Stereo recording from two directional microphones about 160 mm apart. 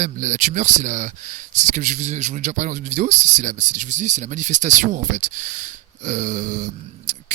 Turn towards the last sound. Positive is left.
turn(degrees=-50)  # may be behind; listen again after turning